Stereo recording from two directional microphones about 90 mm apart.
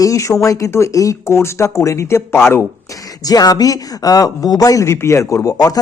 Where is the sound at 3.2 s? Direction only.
45° left (ahead or behind).